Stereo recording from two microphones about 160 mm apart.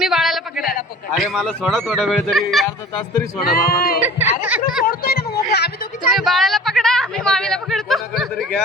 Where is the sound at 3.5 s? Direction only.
70° left (ahead or behind).